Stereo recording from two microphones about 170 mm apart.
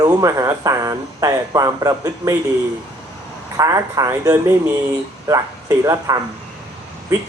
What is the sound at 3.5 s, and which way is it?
Speech, 20° right (ahead or behind).